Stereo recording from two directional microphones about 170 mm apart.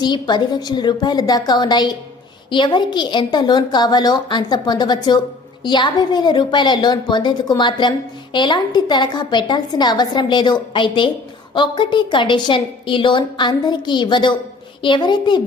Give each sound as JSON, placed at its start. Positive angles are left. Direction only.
{"t": 0.0, "sound": "a woman's voice", "side_deg": 25}